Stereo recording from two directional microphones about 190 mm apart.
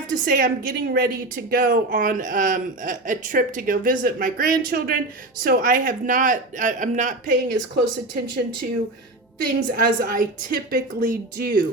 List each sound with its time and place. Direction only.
0.3 s a woman's voice: 45° right (ahead or behind)
9.6 s a woman's voice: 50° right (ahead or behind)